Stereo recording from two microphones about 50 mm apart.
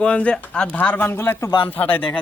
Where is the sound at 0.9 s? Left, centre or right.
Left.